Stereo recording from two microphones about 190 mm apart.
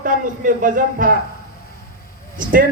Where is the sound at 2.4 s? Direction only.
45° right (ahead or behind).